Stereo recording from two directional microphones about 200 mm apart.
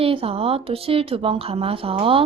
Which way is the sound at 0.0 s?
30° right (ahead or behind).